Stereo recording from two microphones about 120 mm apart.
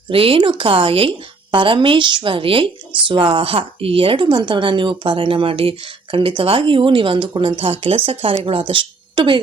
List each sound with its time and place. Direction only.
0.1 s speech: 50° right (ahead or behind)